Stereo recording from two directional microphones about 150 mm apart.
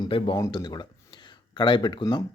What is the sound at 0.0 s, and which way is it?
Speech, 30° left (ahead or behind).